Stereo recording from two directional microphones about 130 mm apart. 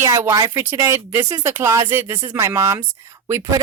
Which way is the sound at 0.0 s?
25° right (ahead or behind).